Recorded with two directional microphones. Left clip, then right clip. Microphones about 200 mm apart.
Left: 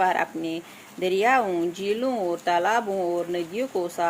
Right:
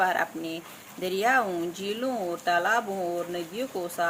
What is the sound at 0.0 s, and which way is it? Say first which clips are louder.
Speech: left 3 dB; 30° left (ahead or behind).